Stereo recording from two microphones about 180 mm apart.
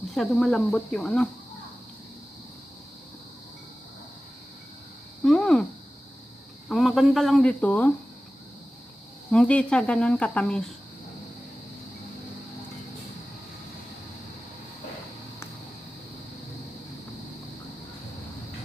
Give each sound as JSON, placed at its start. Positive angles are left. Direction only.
{"t": 0.1, "sound": "speech", "side_deg": 0}
{"t": 5.2, "sound": "a sound", "side_deg": 5}
{"t": 6.7, "sound": "speech", "side_deg": 0}
{"t": 9.3, "sound": "speech", "side_deg": 5}